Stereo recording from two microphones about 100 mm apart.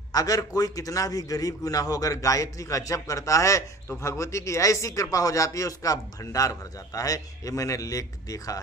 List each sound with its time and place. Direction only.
0.1 s speech: 35° left (ahead or behind)